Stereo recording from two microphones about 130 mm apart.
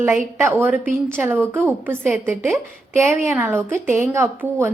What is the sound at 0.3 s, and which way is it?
A woman's voice, 15° right (ahead or behind).